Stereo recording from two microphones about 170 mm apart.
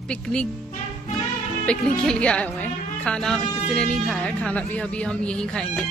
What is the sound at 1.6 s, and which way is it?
Speech, 5° left (ahead or behind).